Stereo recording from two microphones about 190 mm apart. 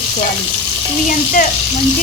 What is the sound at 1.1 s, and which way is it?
Speech, 45° left (ahead or behind).